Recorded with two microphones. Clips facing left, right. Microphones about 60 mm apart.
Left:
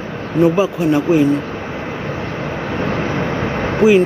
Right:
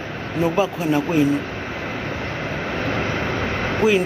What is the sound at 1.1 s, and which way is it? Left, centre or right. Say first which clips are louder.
Speech: left 6 dB; centre.